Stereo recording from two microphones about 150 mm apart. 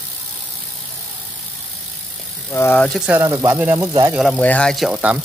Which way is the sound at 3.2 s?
20° right (ahead or behind).